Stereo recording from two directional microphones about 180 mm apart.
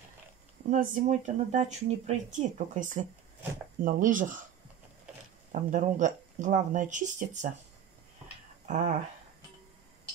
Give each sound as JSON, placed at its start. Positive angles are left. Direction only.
{"t": 0.7, "sound": "speech", "side_deg": -45}
{"t": 5.5, "sound": "speech", "side_deg": -45}
{"t": 8.6, "sound": "speech", "side_deg": -40}